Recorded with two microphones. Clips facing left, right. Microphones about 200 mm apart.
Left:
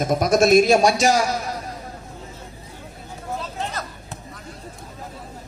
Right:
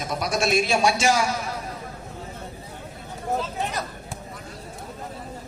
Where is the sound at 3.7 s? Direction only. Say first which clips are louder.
Right 1 dB; 15° right (ahead or behind).